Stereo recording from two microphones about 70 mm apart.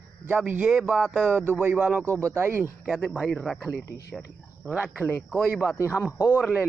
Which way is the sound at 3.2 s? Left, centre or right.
Centre.